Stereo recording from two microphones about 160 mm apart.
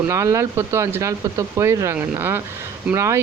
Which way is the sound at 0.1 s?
20° right (ahead or behind).